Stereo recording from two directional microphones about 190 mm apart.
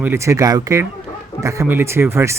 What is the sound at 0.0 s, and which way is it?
Speech, 15° right (ahead or behind).